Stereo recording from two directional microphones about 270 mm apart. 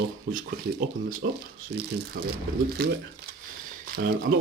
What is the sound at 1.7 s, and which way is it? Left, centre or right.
Speech, right.